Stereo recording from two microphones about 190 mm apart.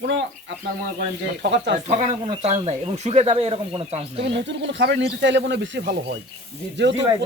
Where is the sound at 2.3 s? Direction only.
35° right (ahead or behind).